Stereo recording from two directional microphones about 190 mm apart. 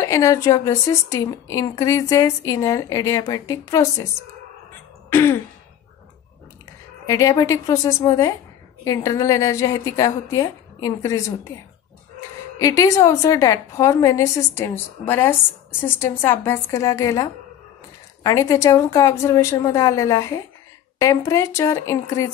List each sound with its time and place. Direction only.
0.0 s a woman's voice: 15° left (ahead or behind)
5.1 s a woman's voice: 10° left (ahead or behind)
7.1 s a woman's voice: 15° left (ahead or behind)
12.5 s a woman's voice: 15° left (ahead or behind)